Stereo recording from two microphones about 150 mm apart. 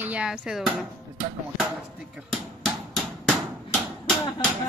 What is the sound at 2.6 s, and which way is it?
Hammer, centre (ahead or behind).